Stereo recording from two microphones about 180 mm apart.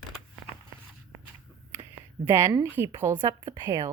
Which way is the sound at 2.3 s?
15° right (ahead or behind).